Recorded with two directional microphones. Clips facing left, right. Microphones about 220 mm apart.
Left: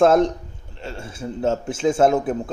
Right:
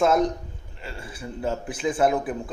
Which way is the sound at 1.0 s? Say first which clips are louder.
Left 6 dB; 25° left (ahead or behind).